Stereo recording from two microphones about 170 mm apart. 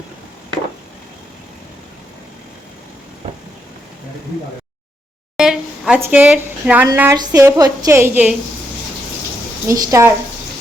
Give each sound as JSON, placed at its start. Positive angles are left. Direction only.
{"t": 5.4, "sound": "a sound", "side_deg": -5}
{"t": 6.8, "sound": "a woman's voice", "side_deg": -15}
{"t": 9.6, "sound": "a woman's voice", "side_deg": -20}